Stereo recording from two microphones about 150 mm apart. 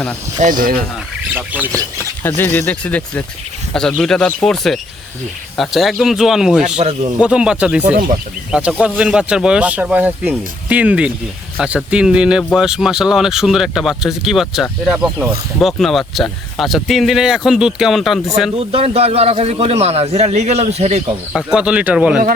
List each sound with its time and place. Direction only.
0.3 s speech: 60° right (ahead or behind)
1.3 s speech: 10° right (ahead or behind)
1.7 s a sound: 20° right (ahead or behind)
2.2 s speech: 10° left (ahead or behind); by 6.7 s 5° right (ahead or behind)
6.7 s a man's voice: 45° right (ahead or behind)
7.2 s speech: 5° right (ahead or behind)
18.5 s a man's voice: 40° right (ahead or behind)
21.3 s speech: 5° right (ahead or behind)